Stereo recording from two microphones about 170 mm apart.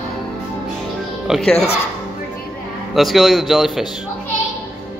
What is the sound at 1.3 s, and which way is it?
Speech, centre (ahead or behind).